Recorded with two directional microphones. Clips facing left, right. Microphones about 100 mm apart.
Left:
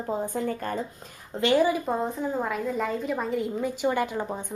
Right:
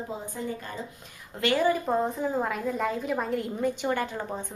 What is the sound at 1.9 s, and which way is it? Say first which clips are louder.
A woman's voice: right 1 dB; centre (ahead or behind).